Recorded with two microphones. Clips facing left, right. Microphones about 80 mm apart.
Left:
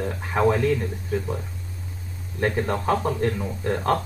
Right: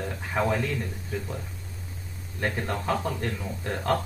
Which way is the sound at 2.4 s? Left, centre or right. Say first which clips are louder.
Left 5 dB; left.